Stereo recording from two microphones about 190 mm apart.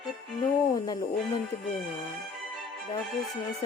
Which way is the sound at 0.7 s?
20° left (ahead or behind).